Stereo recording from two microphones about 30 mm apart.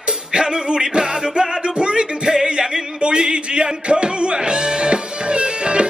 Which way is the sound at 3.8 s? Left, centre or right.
Right.